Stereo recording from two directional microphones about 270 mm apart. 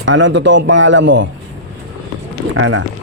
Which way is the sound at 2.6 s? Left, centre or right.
Right.